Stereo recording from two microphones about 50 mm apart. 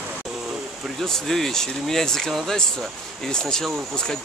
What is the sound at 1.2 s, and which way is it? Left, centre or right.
Speech, centre.